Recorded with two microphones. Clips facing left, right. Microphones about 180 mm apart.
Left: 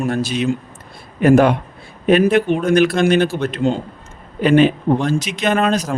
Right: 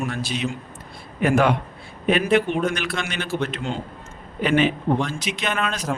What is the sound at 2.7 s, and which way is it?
Speech, 40° left (ahead or behind).